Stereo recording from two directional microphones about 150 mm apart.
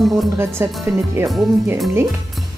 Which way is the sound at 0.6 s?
15° right (ahead or behind).